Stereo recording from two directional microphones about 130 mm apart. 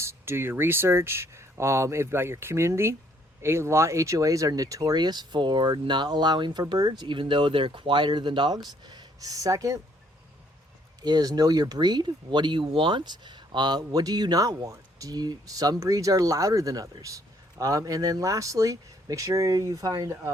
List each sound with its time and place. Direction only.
0.0 s speech: 20° right (ahead or behind)
11.0 s speech: 30° right (ahead or behind)